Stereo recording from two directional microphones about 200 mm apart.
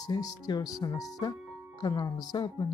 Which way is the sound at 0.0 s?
20° left (ahead or behind).